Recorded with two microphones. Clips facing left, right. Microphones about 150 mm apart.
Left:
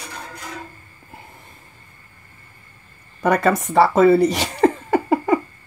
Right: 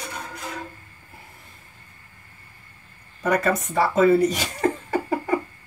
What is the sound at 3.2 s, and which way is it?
Speech, 75° left (ahead or behind).